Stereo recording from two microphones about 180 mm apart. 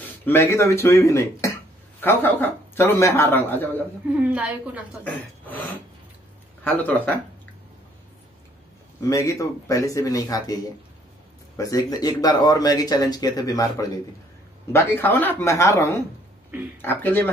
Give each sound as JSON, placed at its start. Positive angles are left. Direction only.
{"t": 0.0, "sound": "speech", "side_deg": 10}
{"t": 4.1, "sound": "a woman's voice", "side_deg": -5}
{"t": 5.0, "sound": "speech", "side_deg": 10}
{"t": 9.1, "sound": "speech", "side_deg": 15}